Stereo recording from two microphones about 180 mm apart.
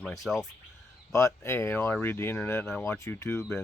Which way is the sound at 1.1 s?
15° left (ahead or behind).